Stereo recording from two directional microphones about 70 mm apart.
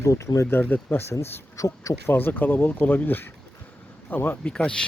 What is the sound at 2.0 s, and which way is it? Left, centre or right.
Speech, left.